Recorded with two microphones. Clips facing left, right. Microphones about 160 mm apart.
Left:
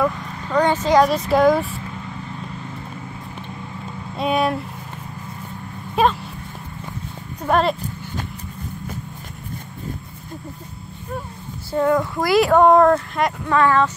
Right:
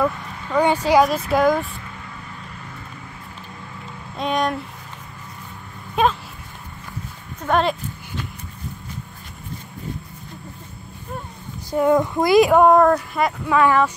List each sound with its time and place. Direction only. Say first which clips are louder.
0.0 s speech: left 1 dB; 5° right (ahead or behind)
1.3 s speech: left 2 dB; centre (ahead or behind)
4.2 s speech: left 2 dB; 5° left (ahead or behind)
6.0 s speech: left 1 dB; 5° left (ahead or behind)
7.4 s speech: left 1 dB; centre (ahead or behind)
11.7 s speech: right 1 dB; 15° right (ahead or behind)
12.6 s speech: left 1 dB; centre (ahead or behind)